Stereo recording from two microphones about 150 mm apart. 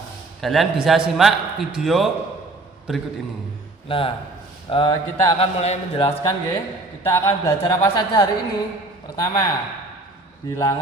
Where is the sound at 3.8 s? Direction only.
35° left (ahead or behind).